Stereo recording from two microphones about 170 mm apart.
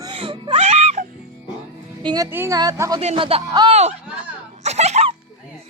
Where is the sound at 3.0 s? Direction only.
35° right (ahead or behind).